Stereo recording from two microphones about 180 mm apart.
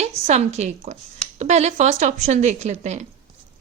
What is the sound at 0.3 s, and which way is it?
A woman's voice, 40° right (ahead or behind).